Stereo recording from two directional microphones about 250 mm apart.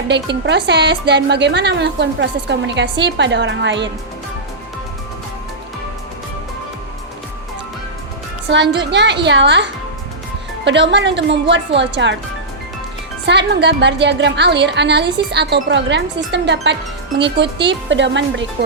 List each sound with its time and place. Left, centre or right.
0.1 s a woman's voice: right
8.5 s a woman's voice: right
10.7 s a woman's voice: right
13.2 s a woman's voice: right